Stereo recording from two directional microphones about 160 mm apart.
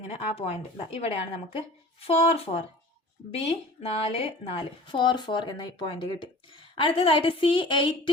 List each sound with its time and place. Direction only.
0.3 s speech: 40° left (ahead or behind)